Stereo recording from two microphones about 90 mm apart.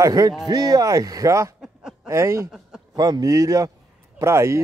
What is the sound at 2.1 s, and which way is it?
Speech, 30° right (ahead or behind).